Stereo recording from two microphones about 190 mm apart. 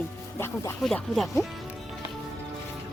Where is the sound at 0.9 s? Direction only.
Centre (ahead or behind).